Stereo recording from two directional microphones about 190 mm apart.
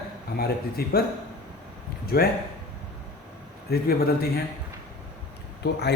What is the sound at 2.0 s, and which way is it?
Speech, 55° left (ahead or behind).